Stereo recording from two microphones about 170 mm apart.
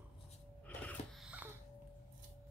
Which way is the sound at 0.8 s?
10° left (ahead or behind).